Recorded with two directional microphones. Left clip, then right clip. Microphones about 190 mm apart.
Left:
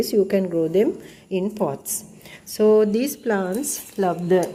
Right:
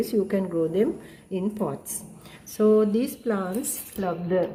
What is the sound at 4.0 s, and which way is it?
Speech, 60° left (ahead or behind).